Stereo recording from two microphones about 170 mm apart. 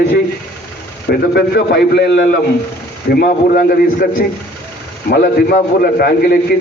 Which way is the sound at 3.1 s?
60° left (ahead or behind).